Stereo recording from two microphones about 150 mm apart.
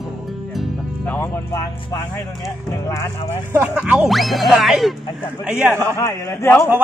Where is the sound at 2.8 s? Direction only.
20° left (ahead or behind).